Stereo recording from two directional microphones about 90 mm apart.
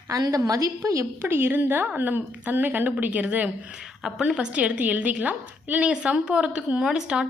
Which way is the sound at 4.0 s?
5° right (ahead or behind).